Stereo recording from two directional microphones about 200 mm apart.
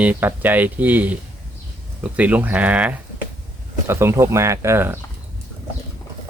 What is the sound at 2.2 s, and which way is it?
Speech, 10° right (ahead or behind).